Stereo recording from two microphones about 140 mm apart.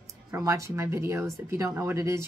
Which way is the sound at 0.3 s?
20° right (ahead or behind).